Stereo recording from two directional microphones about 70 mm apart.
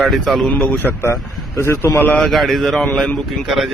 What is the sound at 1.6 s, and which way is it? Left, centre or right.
Speech, left.